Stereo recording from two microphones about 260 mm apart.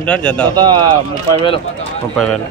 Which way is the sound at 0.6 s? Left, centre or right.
Centre.